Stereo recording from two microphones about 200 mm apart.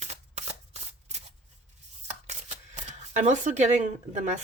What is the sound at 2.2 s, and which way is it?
Speech, 35° right (ahead or behind).